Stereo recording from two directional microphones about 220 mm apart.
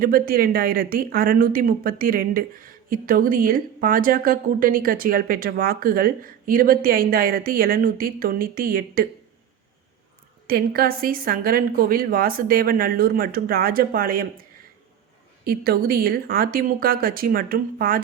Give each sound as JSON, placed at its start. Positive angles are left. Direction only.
{"t": 0.0, "sound": "speech", "side_deg": -40}
{"t": 10.4, "sound": "speech", "side_deg": -45}
{"t": 15.4, "sound": "speech", "side_deg": -45}